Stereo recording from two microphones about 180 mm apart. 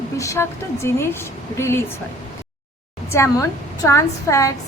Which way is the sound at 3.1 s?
15° left (ahead or behind).